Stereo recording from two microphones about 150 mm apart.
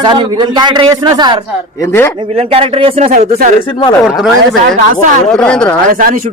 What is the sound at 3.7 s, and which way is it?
Speech, 35° left (ahead or behind).